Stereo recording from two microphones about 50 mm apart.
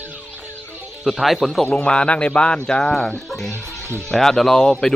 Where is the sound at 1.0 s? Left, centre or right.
Centre.